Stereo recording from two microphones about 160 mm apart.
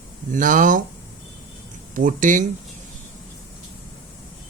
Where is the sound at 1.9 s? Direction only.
55° right (ahead or behind).